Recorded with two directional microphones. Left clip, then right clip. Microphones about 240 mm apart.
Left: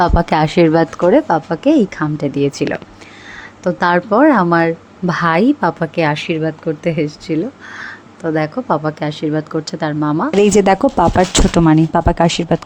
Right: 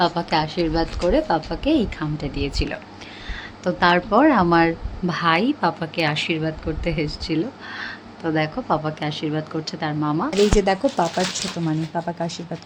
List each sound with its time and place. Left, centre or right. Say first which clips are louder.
0.0 s speech: left 7 dB; left
3.6 s a woman's voice: left 4 dB; left
10.5 s speech: left 8 dB; left